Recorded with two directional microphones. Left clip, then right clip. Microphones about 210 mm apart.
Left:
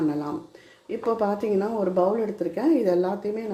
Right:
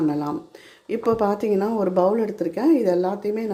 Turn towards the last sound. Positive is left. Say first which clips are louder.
# right 2 dB
turn(degrees=-15)  # may be behind; listen again after turning